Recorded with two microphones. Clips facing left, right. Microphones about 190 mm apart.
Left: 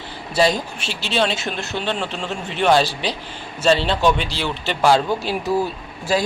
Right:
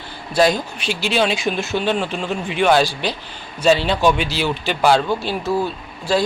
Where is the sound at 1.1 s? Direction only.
5° right (ahead or behind).